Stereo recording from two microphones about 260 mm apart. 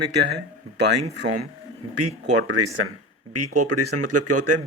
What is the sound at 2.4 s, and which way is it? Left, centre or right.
Speech, right.